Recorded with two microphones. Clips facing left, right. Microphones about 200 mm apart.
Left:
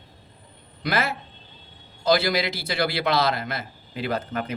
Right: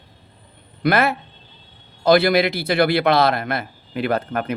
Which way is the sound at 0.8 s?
60° right (ahead or behind).